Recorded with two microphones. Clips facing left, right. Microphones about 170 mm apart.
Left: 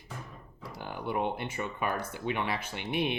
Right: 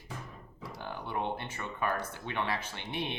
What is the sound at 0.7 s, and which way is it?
Speech, 10° left (ahead or behind).